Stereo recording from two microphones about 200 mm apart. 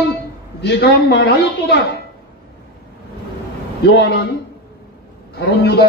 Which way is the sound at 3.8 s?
55° left (ahead or behind).